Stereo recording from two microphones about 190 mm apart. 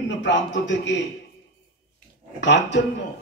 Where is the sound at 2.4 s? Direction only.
70° left (ahead or behind).